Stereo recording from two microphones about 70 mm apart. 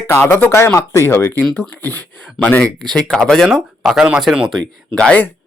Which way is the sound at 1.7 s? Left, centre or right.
Left.